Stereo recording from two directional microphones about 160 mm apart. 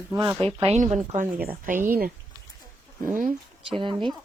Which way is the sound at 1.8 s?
65° right (ahead or behind).